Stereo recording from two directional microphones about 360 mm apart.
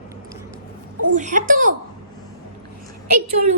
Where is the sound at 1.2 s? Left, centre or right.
Right.